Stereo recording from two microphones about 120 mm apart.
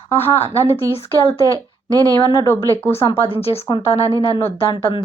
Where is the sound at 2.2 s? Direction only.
35° left (ahead or behind).